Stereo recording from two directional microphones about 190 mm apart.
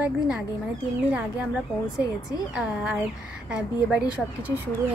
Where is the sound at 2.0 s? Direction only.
20° left (ahead or behind).